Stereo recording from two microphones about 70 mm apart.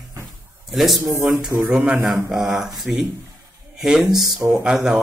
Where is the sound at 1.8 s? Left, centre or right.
Centre.